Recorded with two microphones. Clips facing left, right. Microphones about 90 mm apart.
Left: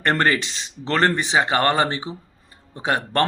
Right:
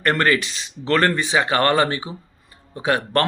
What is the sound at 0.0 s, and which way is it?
Speech, 30° left (ahead or behind).